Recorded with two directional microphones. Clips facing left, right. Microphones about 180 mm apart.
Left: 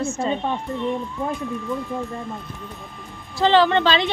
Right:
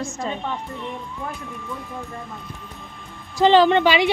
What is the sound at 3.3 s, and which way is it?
Speech, 15° right (ahead or behind).